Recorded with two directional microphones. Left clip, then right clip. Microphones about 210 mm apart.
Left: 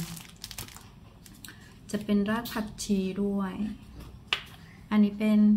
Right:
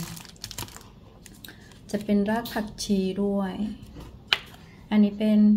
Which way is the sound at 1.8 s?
10° left (ahead or behind).